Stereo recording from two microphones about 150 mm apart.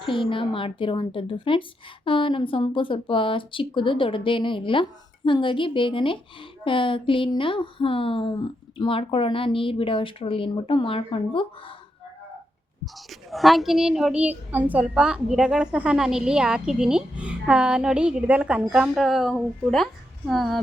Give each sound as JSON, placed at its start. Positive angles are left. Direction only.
{"t": 0.0, "sound": "speech", "side_deg": 35}
{"t": 12.8, "sound": "a child's voice", "side_deg": 0}